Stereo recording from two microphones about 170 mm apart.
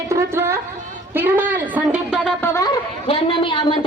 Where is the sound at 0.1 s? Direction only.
15° right (ahead or behind).